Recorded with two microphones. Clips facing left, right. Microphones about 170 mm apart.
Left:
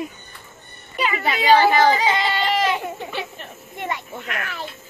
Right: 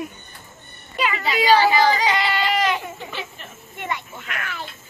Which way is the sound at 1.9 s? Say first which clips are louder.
Left 1 dB; 25° left (ahead or behind).